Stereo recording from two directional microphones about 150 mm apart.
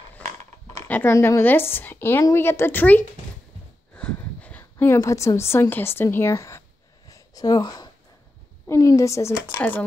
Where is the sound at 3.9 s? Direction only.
5° left (ahead or behind).